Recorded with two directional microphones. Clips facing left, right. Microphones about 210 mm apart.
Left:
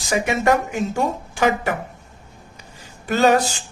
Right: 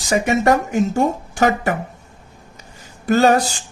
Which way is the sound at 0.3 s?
40° right (ahead or behind).